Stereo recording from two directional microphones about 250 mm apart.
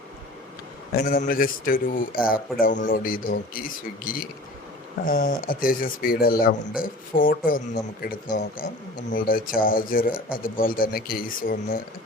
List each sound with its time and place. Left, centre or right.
0.9 s speech: left